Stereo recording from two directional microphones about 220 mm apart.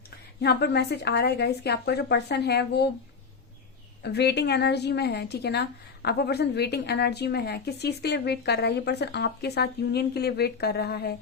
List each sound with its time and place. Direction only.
0.4 s a woman's voice: 50° left (ahead or behind)
4.0 s a woman's voice: 50° left (ahead or behind)